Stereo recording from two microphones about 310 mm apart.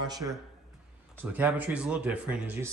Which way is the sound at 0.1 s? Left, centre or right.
Centre.